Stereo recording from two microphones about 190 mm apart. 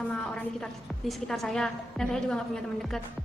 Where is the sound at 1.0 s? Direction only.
Centre (ahead or behind).